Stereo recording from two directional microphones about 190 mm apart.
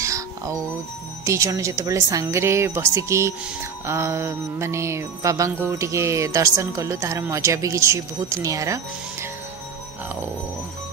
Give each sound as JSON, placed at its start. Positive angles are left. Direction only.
{"t": 0.0, "sound": "music", "side_deg": -15}